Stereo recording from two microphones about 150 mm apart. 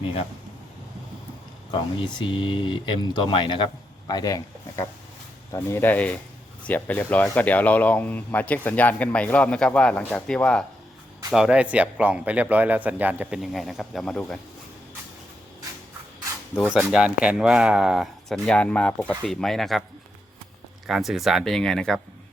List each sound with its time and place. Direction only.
1.7 s speech: 30° left (ahead or behind)
5.6 s speech: 15° left (ahead or behind); by 13.4 s 10° right (ahead or behind)
13.4 s speech: centre (ahead or behind)
16.6 s speech: 5° right (ahead or behind)
20.8 s speech: centre (ahead or behind)